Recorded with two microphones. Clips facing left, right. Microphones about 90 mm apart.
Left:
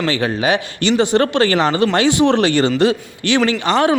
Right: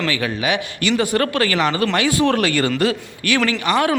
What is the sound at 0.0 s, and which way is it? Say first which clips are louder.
Speech: left 4 dB; 35° left (ahead or behind).